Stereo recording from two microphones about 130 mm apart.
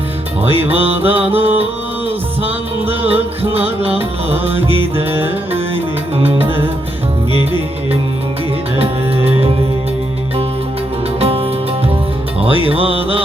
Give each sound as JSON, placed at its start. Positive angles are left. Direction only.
{"t": 0.4, "sound": "music", "side_deg": -50}
{"t": 0.9, "sound": "music", "side_deg": -15}
{"t": 2.8, "sound": "music", "side_deg": -50}
{"t": 8.7, "sound": "music", "side_deg": -45}
{"t": 11.2, "sound": "music", "side_deg": -50}